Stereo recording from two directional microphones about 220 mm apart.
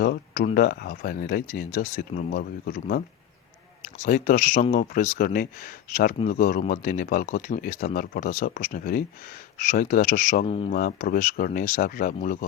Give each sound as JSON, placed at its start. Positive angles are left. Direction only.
{"t": 0.0, "sound": "a sound", "side_deg": 45}
{"t": 0.5, "sound": "speech", "side_deg": 40}
{"t": 10.8, "sound": "speech", "side_deg": 40}